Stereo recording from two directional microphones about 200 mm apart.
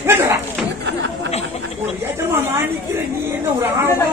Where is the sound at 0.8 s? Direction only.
60° right (ahead or behind).